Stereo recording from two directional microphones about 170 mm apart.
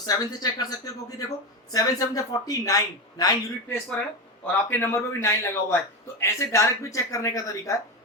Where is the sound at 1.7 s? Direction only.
20° left (ahead or behind).